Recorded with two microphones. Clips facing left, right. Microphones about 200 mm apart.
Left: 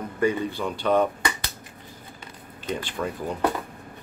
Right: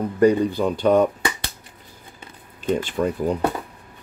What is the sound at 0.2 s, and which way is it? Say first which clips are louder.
Speech: right 7 dB; 40° right (ahead or behind).